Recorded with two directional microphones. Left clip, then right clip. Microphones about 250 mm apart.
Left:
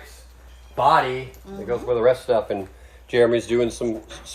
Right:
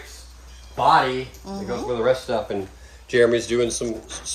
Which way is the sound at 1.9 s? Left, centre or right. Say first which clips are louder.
Left 3 dB; left.